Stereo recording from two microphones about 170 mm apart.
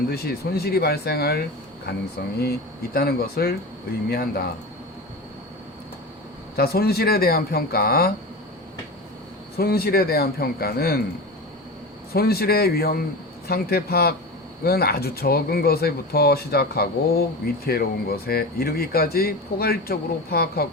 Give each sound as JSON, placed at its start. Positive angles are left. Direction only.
{"t": 0.1, "sound": "speech", "side_deg": 65}
{"t": 6.6, "sound": "speech", "side_deg": 65}
{"t": 9.6, "sound": "speech", "side_deg": 65}
{"t": 12.1, "sound": "speech", "side_deg": 65}